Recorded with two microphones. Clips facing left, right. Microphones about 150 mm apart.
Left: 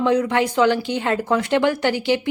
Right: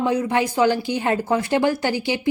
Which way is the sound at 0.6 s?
65° left (ahead or behind).